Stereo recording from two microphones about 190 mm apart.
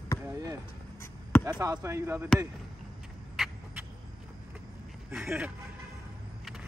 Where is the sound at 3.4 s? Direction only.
Centre (ahead or behind).